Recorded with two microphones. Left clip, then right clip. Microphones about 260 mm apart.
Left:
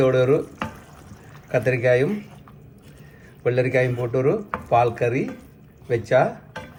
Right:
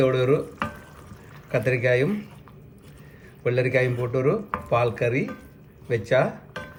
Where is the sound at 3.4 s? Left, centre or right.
Centre.